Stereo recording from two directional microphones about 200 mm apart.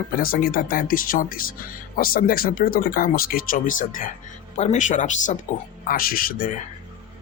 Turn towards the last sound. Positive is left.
turn(degrees=45)  # may be behind; listen again after turning